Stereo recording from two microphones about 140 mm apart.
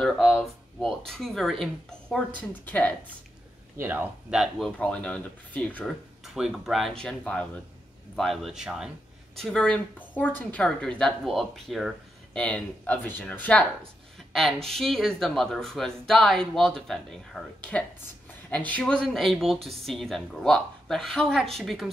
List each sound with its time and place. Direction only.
0.2 s speech: 5° right (ahead or behind)
3.8 s speech: 15° right (ahead or behind); by 5.9 s 10° left (ahead or behind)
6.2 s speech: 5° right (ahead or behind)